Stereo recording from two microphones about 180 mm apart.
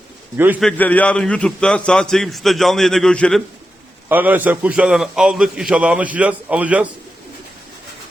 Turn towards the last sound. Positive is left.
turn(degrees=-10)  # may be behind; listen again after turning